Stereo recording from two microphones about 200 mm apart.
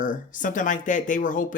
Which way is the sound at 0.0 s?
40° left (ahead or behind).